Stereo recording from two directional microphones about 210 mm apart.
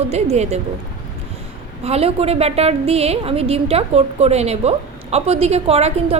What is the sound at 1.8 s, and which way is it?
A woman's voice, 30° right (ahead or behind).